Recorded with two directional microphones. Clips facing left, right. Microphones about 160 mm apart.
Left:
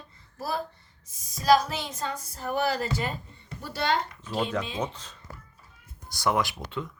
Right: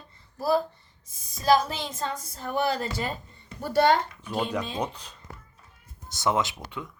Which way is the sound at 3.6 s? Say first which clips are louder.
Right 7 dB; 50° right (ahead or behind).